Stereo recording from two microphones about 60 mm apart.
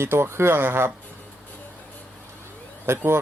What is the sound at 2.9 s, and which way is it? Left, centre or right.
Speech, right.